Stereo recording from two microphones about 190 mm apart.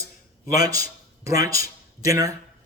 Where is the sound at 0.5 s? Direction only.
20° right (ahead or behind).